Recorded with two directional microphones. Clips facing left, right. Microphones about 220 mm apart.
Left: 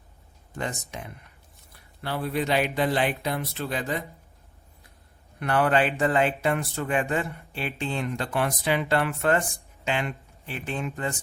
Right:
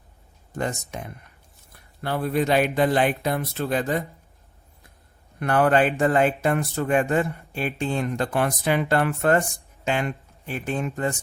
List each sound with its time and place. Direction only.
0.5 s speech: 45° right (ahead or behind)
5.4 s speech: 45° right (ahead or behind)